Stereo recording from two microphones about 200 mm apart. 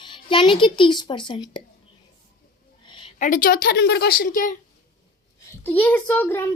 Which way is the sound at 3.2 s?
40° left (ahead or behind).